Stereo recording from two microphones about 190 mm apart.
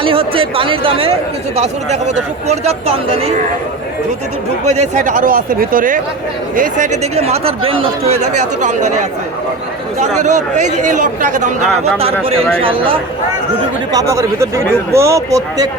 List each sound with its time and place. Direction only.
0.0 s speech: 30° right (ahead or behind)
4.6 s speech: 35° right (ahead or behind)
10.2 s speech: 40° right (ahead or behind)
13.9 s speech: 15° right (ahead or behind)